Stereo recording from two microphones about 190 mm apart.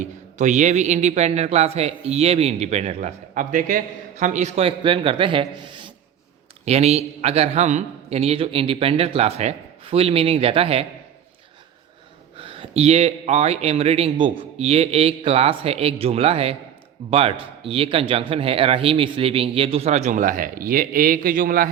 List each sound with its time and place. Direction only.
0.0 s a man's voice: 40° right (ahead or behind)
12.4 s a man's voice: 30° right (ahead or behind); by 21.7 s 45° right (ahead or behind)